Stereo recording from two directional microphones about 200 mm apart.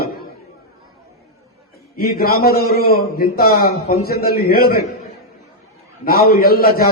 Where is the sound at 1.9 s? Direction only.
50° left (ahead or behind).